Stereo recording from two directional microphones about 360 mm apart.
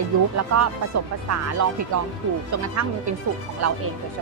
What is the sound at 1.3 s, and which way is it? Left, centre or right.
Speech, right.